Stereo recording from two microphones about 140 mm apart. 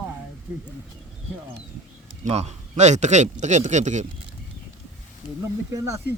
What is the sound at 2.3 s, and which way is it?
A man's voice, 50° right (ahead or behind).